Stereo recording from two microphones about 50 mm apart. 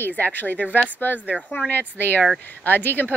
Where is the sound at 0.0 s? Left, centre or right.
Left.